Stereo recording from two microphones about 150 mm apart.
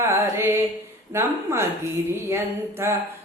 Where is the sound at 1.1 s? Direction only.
15° right (ahead or behind).